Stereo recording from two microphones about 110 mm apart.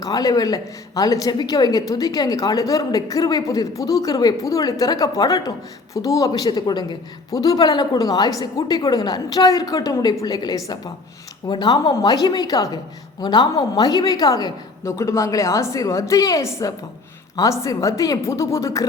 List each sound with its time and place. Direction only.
0.0 s a woman's voice: 35° left (ahead or behind)